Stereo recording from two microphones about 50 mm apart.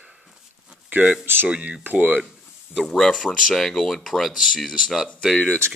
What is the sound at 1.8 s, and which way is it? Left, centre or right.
Speech, right.